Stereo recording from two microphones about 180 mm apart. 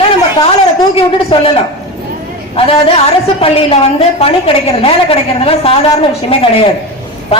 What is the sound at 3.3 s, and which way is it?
A woman's voice, 35° left (ahead or behind).